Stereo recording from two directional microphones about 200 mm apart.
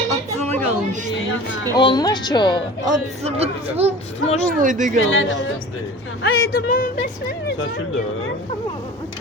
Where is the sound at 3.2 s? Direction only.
30° right (ahead or behind).